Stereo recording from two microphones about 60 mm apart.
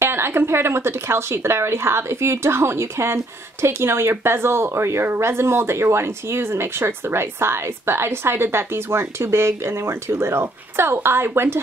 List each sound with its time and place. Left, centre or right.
0.0 s a woman's voice: right